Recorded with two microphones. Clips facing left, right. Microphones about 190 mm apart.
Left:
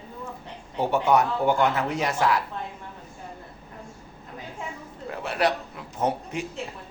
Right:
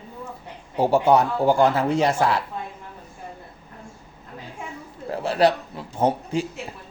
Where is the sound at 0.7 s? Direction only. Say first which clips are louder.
Right 4 dB; 35° right (ahead or behind).